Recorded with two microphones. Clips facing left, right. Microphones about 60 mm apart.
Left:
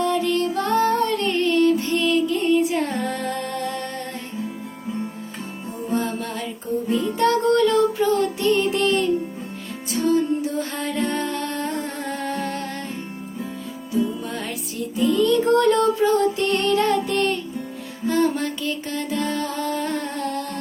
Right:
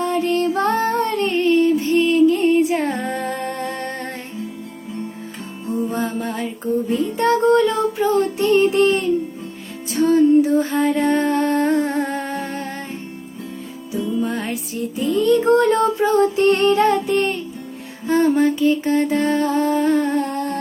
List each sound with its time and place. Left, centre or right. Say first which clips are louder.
0.0 s music: right 2 dB; right
1.4 s music: right 3 dB; centre
3.5 s music: right 2 dB; right
6.1 s music: right 3 dB; centre
10.7 s music: right 9 dB; centre
10.9 s music: right 7 dB; right
12.3 s music: right 1 dB; centre
14.3 s music: right 5 dB; right
18.0 s music: right 3 dB; right
18.3 s music: right 10 dB; right